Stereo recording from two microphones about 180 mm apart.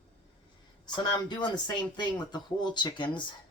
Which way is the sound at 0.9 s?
25° left (ahead or behind).